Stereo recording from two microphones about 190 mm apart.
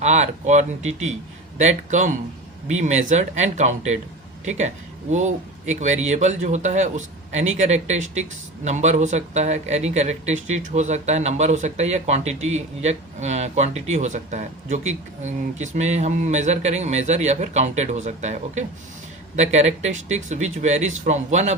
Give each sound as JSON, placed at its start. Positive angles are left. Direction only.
{"t": 0.0, "sound": "speech", "side_deg": -35}